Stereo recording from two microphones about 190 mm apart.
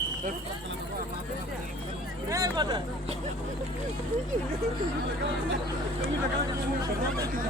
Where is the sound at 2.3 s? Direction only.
20° right (ahead or behind).